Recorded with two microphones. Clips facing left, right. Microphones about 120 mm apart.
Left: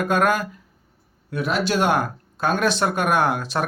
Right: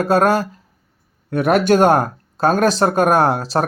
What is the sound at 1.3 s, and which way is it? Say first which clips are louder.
Speech: right 8 dB; 55° right (ahead or behind).